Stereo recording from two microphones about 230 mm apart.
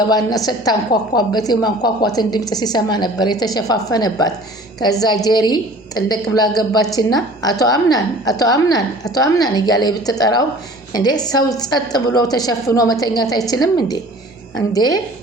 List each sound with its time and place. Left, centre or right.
0.1 s a woman's voice: centre